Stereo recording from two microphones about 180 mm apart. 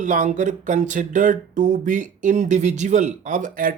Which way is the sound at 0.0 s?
45° right (ahead or behind).